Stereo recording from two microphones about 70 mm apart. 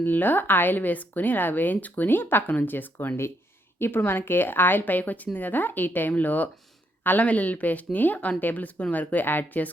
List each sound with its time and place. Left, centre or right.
0.0 s speech: left